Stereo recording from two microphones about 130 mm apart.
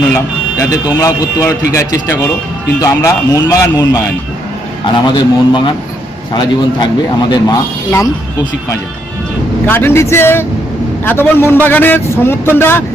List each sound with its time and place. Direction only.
0.1 s a man's voice: 25° left (ahead or behind)
5.0 s a man's voice: 35° left (ahead or behind)
9.6 s a man's voice: 15° left (ahead or behind)